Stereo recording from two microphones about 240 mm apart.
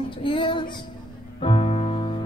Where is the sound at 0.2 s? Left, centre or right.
Left.